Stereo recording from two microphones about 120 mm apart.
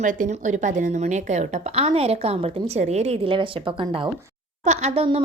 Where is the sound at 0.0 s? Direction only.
90° right; by 3.3 s 65° right (ahead or behind).